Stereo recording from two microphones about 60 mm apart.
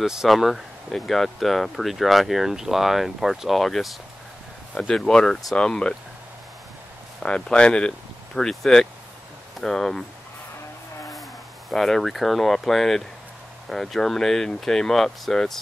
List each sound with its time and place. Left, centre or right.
0.0 s speech: centre
4.7 s speech: centre
7.2 s speech: centre
11.7 s speech: centre